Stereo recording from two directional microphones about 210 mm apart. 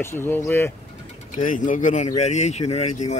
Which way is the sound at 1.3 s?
35° left (ahead or behind).